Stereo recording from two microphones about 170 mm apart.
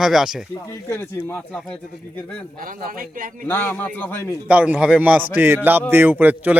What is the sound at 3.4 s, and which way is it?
Speech, 10° left (ahead or behind).